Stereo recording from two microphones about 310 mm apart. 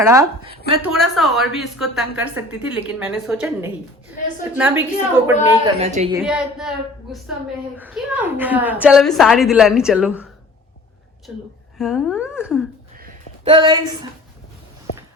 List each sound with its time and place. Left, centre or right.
0.0 s a woman's voice: centre
5.8 s a woman's voice: right
6.1 s a woman's voice: centre
13.0 s a sound: right